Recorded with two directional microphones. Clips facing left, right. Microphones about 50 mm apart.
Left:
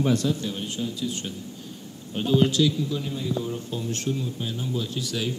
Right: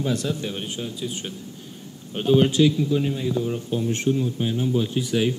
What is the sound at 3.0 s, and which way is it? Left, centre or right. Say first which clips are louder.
Speech: right 4 dB; right.